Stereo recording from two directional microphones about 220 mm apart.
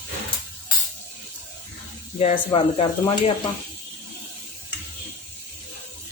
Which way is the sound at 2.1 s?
25° left (ahead or behind).